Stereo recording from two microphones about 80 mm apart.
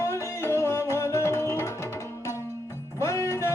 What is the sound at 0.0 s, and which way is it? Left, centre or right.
Music, left.